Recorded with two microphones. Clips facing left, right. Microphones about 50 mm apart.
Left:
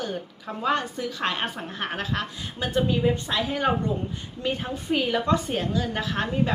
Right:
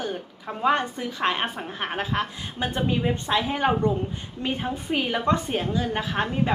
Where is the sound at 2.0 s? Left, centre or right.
Right.